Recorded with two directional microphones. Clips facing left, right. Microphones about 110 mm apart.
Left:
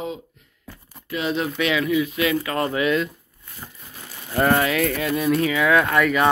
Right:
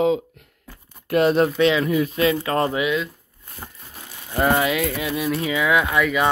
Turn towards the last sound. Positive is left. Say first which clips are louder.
# left 1 dB
turn(degrees=-5)  # may be behind; listen again after turning